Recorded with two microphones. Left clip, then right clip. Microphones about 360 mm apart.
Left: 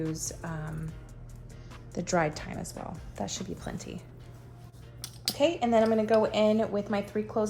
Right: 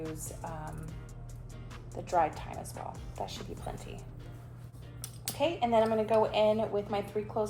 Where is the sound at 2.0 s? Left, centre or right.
Left.